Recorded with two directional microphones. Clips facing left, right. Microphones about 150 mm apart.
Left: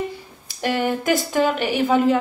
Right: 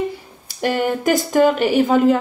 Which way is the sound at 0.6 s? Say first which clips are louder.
Right 2 dB; 45° right (ahead or behind).